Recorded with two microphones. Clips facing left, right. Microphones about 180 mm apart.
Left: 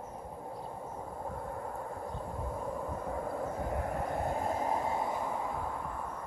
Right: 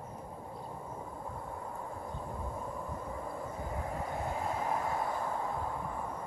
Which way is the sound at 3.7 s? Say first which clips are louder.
Left 3 dB; 55° left (ahead or behind).